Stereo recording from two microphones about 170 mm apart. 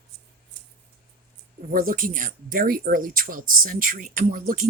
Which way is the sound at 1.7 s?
55° right (ahead or behind).